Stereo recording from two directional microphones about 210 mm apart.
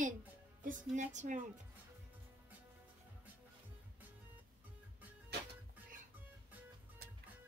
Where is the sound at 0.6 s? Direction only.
40° right (ahead or behind).